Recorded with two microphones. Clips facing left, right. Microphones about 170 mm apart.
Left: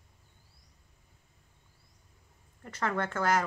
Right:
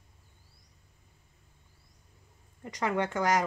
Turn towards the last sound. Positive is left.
turn(degrees=-15)  # may be behind; listen again after turning